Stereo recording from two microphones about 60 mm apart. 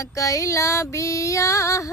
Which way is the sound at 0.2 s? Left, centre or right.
Left.